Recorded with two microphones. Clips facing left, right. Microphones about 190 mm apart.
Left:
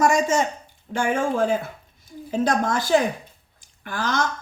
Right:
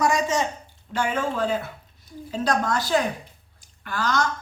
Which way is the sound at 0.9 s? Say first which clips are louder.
Left 3 dB; 50° left (ahead or behind).